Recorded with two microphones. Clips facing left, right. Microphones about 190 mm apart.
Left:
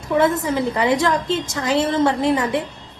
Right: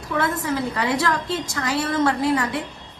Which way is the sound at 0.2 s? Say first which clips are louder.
Left 5 dB; 20° left (ahead or behind).